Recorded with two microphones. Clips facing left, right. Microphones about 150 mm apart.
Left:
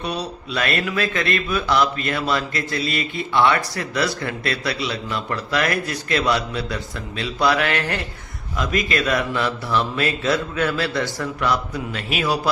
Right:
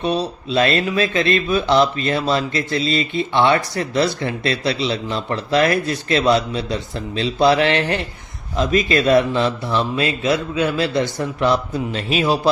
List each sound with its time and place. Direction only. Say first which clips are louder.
0.0 s speech: right 6 dB; 25° right (ahead or behind)